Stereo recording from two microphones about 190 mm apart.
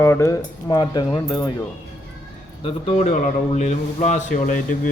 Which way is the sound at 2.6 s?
30° left (ahead or behind).